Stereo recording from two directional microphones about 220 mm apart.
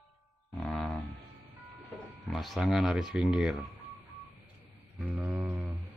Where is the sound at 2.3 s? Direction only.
Centre (ahead or behind).